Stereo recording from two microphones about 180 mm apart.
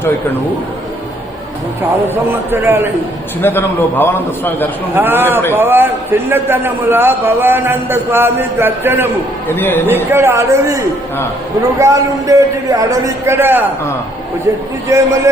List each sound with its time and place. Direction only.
2.5 s a man's voice: 10° right (ahead or behind)
3.4 s a man's voice: 10° left (ahead or behind)
4.9 s a man's voice: 10° right (ahead or behind)
9.5 s a man's voice: 10° left (ahead or behind)
9.8 s a man's voice: 10° right (ahead or behind)
14.8 s a man's voice: 20° right (ahead or behind)